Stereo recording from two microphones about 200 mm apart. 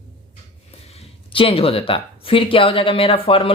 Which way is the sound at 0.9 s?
25° left (ahead or behind).